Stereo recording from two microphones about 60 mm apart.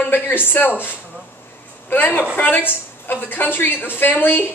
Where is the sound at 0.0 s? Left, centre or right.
Left.